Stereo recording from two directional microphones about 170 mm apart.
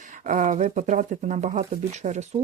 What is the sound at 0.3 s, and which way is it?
Speech, 50° right (ahead or behind).